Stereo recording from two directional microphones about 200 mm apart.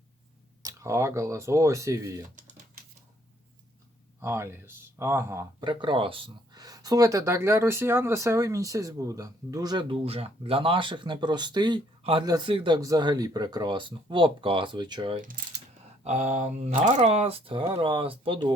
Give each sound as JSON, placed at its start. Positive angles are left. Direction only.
{"t": 0.6, "sound": "speech", "side_deg": -15}
{"t": 4.2, "sound": "speech", "side_deg": -15}
{"t": 15.1, "sound": "mechanisms", "side_deg": -40}
{"t": 16.0, "sound": "speech", "side_deg": -35}